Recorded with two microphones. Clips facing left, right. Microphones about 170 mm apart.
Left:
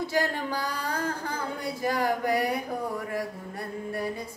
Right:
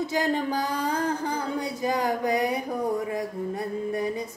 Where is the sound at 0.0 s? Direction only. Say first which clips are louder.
Right 3 dB; 20° right (ahead or behind).